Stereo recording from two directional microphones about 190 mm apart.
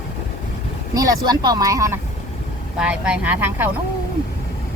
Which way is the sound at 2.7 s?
5° right (ahead or behind).